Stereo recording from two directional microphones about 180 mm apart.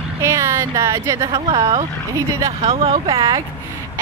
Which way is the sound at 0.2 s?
15° right (ahead or behind).